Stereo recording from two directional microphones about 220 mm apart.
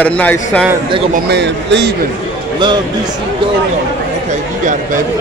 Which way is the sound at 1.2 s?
50° right (ahead or behind).